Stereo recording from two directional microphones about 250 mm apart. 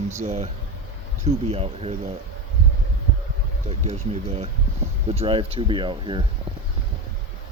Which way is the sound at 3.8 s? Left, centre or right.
Right.